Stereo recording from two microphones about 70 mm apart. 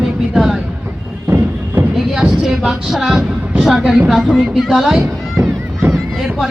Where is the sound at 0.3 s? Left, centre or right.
Centre.